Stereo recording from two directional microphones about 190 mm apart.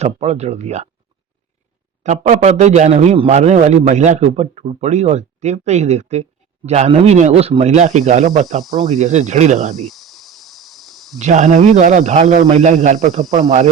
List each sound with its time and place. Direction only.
0.0 s speech: 35° right (ahead or behind)
2.0 s speech: 40° right (ahead or behind)
8.6 s speech: centre (ahead or behind)
9.0 s speech: 35° right (ahead or behind)
9.7 s cricket: centre (ahead or behind)
11.2 s speech: 40° right (ahead or behind)